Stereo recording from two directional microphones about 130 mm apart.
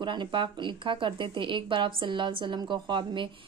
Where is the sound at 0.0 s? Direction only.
35° right (ahead or behind).